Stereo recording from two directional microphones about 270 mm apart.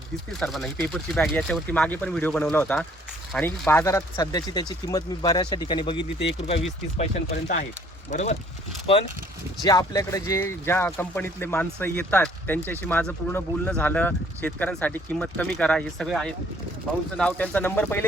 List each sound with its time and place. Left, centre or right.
0.3 s speech: centre; by 8.4 s left
9.6 s speech: centre